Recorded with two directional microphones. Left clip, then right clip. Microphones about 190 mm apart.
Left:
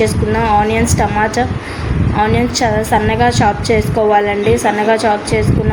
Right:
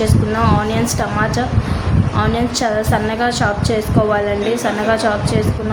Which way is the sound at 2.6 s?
5° left (ahead or behind).